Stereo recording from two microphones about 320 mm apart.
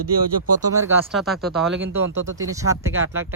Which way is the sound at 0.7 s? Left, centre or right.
Centre.